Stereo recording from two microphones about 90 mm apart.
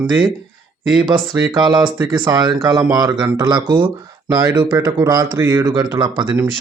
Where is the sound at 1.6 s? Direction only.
50° right (ahead or behind).